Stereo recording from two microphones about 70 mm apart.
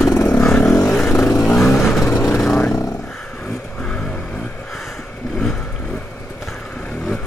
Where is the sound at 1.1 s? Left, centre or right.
Left.